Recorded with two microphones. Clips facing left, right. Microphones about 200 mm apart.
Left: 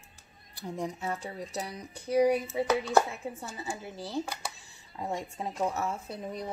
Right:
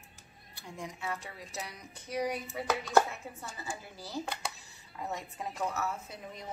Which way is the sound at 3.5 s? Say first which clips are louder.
Left 5 dB; 25° left (ahead or behind).